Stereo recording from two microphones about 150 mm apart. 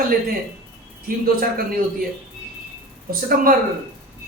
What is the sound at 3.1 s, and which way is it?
Speech, 75° right (ahead or behind).